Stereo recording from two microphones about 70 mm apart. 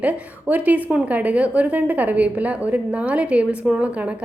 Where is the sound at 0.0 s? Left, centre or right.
Right.